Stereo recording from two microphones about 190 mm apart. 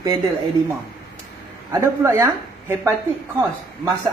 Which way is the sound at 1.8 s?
15° right (ahead or behind).